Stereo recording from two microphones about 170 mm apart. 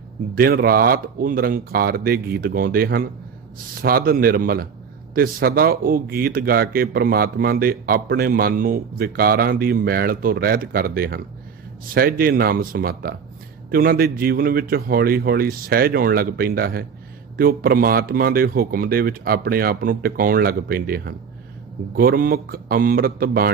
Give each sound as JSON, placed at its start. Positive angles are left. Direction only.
{"t": 0.3, "sound": "speech", "side_deg": -60}